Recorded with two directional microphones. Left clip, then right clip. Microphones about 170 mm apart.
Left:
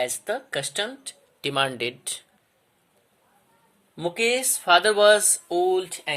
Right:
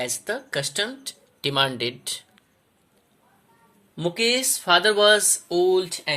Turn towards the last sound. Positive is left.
turn(degrees=45)  # may be behind; listen again after turning